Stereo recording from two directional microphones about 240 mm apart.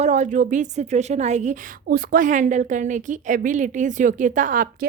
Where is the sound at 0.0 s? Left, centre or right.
Right.